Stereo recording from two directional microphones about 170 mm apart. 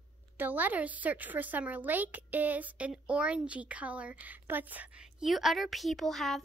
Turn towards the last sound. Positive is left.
turn(degrees=0)  # may be behind; listen again after turning